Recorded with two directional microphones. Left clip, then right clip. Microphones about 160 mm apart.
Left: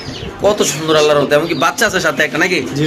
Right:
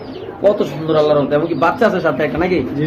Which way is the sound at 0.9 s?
15° left (ahead or behind).